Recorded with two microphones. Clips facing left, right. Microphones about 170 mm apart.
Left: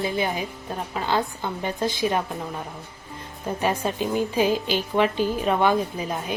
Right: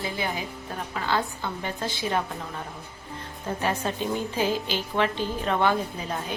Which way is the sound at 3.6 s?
10° left (ahead or behind).